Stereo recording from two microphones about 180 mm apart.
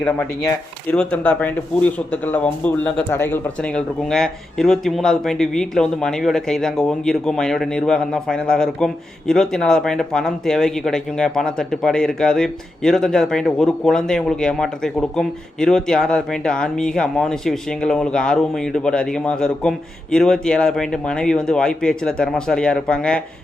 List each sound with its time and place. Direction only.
0.0 s speech: 10° left (ahead or behind)